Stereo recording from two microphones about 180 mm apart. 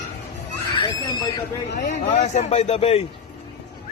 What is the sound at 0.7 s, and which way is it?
Speech, 25° left (ahead or behind).